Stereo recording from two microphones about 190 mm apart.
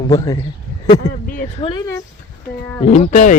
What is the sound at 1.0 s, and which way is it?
Speech, 50° left (ahead or behind).